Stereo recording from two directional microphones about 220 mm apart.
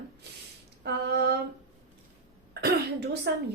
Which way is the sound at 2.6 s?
45° right (ahead or behind).